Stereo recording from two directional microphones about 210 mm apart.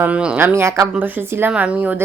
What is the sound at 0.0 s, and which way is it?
Speech, 5° right (ahead or behind).